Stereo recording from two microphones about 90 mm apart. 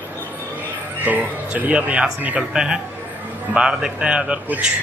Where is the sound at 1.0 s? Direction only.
15° right (ahead or behind).